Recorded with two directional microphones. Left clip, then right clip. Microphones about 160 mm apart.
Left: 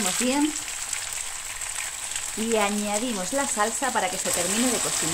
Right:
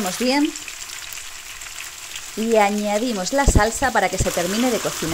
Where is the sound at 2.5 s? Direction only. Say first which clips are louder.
Right 7 dB; 30° right (ahead or behind).